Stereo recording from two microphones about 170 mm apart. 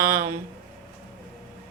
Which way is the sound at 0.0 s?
15° right (ahead or behind).